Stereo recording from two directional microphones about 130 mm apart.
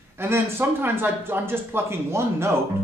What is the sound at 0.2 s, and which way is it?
Speech, 15° right (ahead or behind).